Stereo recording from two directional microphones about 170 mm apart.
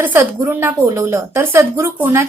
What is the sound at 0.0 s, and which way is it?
A woman's voice, 15° right (ahead or behind).